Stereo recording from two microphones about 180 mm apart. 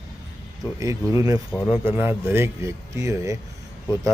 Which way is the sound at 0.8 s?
20° right (ahead or behind).